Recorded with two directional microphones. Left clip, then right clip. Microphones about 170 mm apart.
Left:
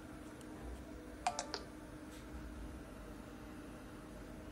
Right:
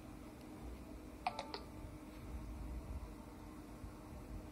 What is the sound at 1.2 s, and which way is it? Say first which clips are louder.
Computer keyboard: left 3 dB; 20° left (ahead or behind).